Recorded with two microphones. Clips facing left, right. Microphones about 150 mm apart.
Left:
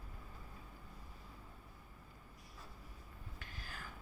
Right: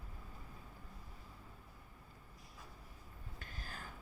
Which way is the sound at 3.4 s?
40° right (ahead or behind).